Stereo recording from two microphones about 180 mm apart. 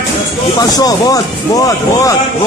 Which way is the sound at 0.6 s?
20° left (ahead or behind).